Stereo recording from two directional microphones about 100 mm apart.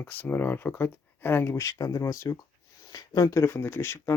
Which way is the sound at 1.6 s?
35° left (ahead or behind).